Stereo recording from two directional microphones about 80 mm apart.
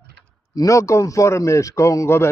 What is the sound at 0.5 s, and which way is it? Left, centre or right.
A man's voice, left.